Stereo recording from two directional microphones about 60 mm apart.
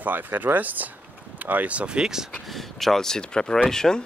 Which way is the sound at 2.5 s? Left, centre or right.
Centre.